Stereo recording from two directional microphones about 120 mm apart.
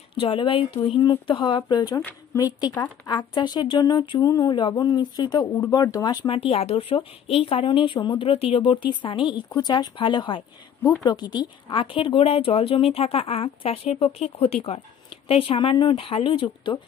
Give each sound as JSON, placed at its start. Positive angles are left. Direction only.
{"t": 0.1, "sound": "speech", "side_deg": 45}
{"t": 6.2, "sound": "speech", "side_deg": 50}
{"t": 7.6, "sound": "speech", "side_deg": 45}